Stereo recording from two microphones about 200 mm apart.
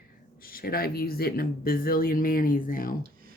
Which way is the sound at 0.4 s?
45° left (ahead or behind).